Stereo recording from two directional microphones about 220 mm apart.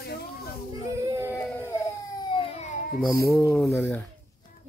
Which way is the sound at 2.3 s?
30° left (ahead or behind).